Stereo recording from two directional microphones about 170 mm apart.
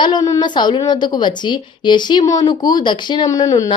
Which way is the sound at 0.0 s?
25° left (ahead or behind).